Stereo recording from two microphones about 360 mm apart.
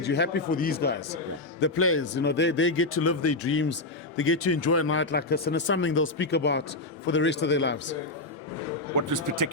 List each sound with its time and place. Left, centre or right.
0.0 s speech: left
9.0 s speech: right